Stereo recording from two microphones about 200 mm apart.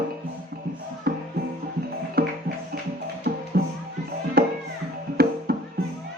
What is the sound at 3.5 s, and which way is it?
Music, 50° right (ahead or behind).